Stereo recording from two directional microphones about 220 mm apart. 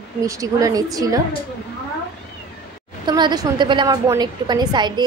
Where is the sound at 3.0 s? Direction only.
20° right (ahead or behind).